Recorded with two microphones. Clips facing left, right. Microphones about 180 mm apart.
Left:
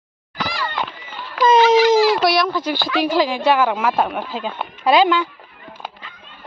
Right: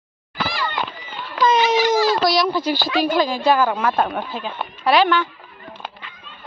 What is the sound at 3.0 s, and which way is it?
Speech, 70° left (ahead or behind).